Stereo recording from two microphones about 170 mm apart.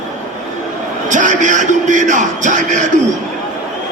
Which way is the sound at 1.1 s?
45° right (ahead or behind).